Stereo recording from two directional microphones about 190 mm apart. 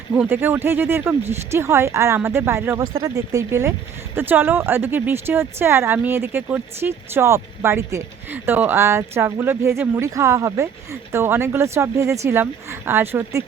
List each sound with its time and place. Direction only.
0.1 s speech: 10° right (ahead or behind)